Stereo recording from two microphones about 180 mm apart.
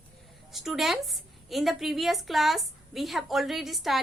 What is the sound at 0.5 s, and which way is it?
A woman's voice, centre (ahead or behind).